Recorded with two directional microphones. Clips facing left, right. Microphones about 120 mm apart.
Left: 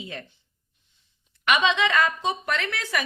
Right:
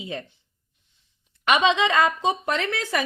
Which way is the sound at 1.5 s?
25° right (ahead or behind).